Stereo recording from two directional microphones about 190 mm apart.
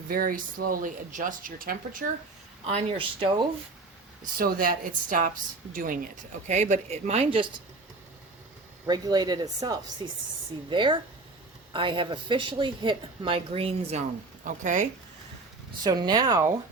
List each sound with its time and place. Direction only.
0.1 s speech: 50° right (ahead or behind)
2.6 s speech: 30° right (ahead or behind)
4.4 s speech: 50° right (ahead or behind); by 7.4 s 30° right (ahead or behind)
8.9 s speech: 20° right (ahead or behind)
14.4 s speech: 40° right (ahead or behind)
15.8 s speech: 20° right (ahead or behind)